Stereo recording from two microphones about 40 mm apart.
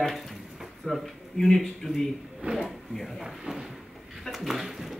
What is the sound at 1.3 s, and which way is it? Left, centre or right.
Speech, centre.